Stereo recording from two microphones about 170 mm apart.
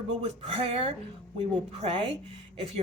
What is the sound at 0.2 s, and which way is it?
A woman's voice, 35° right (ahead or behind).